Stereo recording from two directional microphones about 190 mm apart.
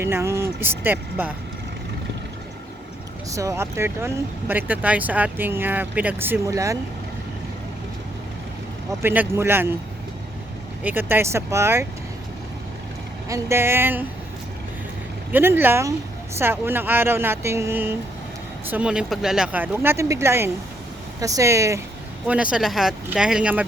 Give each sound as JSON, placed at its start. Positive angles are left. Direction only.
{"t": 0.0, "sound": "speech", "side_deg": -15}
{"t": 3.2, "sound": "speech", "side_deg": -15}
{"t": 9.0, "sound": "speech", "side_deg": -10}
{"t": 10.8, "sound": "speech", "side_deg": -10}
{"t": 13.2, "sound": "speech", "side_deg": -15}
{"t": 15.3, "sound": "speech", "side_deg": -10}